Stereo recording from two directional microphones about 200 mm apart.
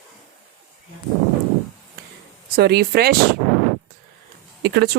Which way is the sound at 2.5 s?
55° right (ahead or behind).